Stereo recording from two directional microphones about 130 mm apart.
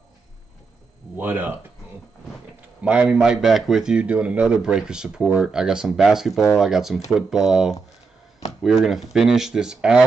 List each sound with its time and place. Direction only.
1.1 s speech: 15° right (ahead or behind)
2.8 s speech: 10° right (ahead or behind)